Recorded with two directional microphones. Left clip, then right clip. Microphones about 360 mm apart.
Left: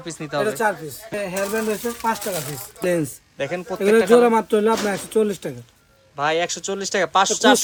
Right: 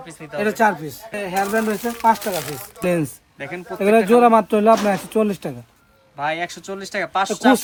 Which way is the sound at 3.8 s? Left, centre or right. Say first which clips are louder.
Right 1 dB; centre.